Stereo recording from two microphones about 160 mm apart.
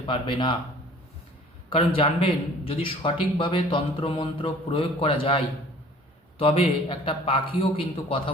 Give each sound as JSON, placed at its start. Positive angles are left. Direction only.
{"t": 0.0, "sound": "a man's voice", "side_deg": 30}
{"t": 1.7, "sound": "a man's voice", "side_deg": 35}
{"t": 6.4, "sound": "a man's voice", "side_deg": 35}